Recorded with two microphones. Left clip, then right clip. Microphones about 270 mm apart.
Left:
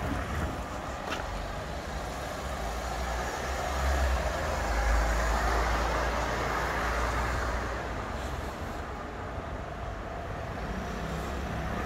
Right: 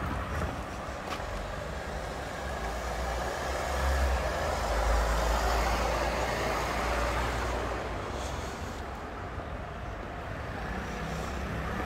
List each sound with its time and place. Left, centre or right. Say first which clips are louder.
5.5 s vehicle: even; right